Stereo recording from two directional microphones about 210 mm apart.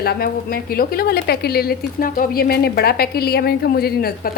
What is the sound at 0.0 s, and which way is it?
A woman's voice, 45° left (ahead or behind).